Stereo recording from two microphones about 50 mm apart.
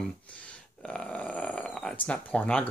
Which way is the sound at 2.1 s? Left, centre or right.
Left.